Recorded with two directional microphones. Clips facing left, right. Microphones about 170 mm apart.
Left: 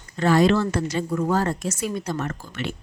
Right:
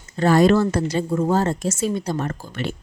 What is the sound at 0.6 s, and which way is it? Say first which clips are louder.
Speech: right 3 dB; 30° right (ahead or behind).